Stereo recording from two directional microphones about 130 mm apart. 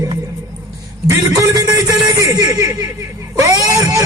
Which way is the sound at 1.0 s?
25° right (ahead or behind).